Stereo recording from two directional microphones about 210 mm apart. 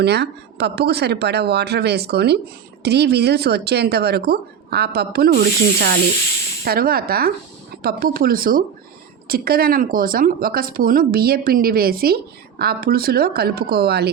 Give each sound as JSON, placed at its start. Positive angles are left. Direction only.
{"t": 0.0, "sound": "speech", "side_deg": -50}